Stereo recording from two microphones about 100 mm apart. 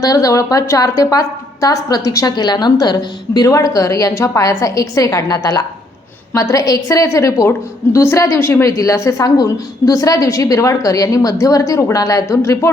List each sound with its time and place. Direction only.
0.0 s a woman's voice: 35° left (ahead or behind)